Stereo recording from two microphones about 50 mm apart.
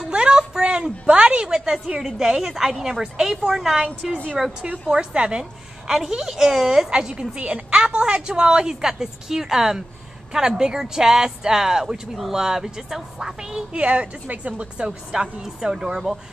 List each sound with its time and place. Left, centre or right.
0.1 s a sound: centre
2.0 s a woman's voice: centre
4.9 s a woman's voice: right
5.4 s a woman's voice: centre
6.9 s a woman's voice: centre
13.8 s a woman's voice: right
14.9 s a woman's voice: centre